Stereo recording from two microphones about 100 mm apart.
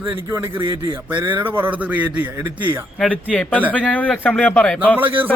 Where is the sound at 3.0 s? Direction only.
5° left (ahead or behind).